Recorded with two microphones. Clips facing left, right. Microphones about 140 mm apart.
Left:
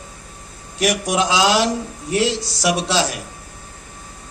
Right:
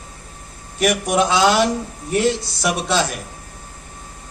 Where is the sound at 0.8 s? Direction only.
55° right (ahead or behind).